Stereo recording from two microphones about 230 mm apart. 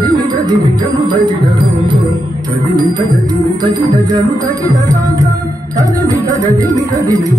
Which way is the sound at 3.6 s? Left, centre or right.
Centre.